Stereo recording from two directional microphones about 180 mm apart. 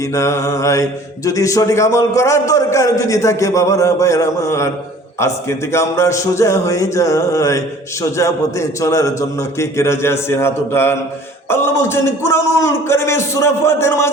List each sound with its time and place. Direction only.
0.1 s speech: 15° left (ahead or behind)